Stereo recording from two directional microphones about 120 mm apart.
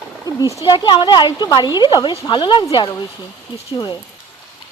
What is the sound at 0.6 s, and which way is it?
Speech, 40° left (ahead or behind).